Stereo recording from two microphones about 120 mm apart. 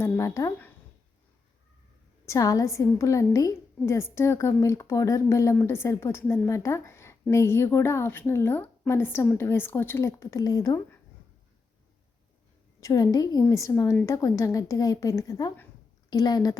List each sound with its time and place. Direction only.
0.2 s a woman's voice: 25° left (ahead or behind)
2.2 s a woman's voice: 30° left (ahead or behind)
12.8 s a woman's voice: 30° left (ahead or behind)